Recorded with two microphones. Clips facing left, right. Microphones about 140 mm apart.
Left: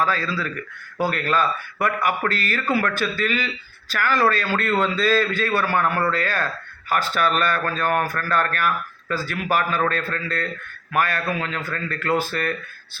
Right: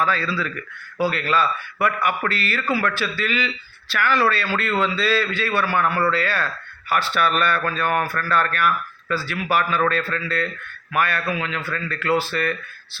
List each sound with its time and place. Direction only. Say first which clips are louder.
0.0 s speech: even; 40° left (ahead or behind)